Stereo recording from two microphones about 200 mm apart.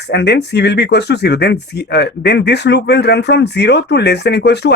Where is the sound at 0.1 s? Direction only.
60° left (ahead or behind).